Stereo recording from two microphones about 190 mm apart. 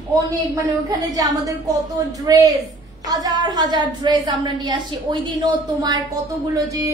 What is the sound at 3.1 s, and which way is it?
A woman's voice, 20° right (ahead or behind).